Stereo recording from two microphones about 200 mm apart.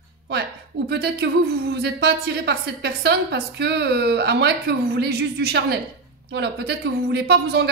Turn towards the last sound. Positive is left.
turn(degrees=-55)  # may be behind; listen again after turning